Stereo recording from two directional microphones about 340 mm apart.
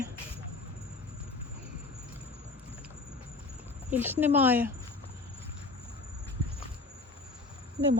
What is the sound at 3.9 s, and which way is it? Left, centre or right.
Speech, centre.